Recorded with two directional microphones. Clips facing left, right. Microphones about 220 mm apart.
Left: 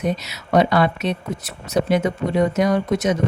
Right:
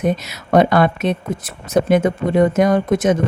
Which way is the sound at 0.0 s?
50° right (ahead or behind).